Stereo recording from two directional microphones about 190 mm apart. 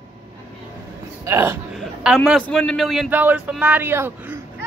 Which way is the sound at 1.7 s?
Centre (ahead or behind).